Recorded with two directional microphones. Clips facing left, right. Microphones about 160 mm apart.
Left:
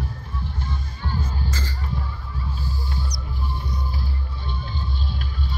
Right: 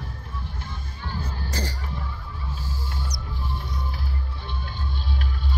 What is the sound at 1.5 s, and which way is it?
Music, 70° right (ahead or behind).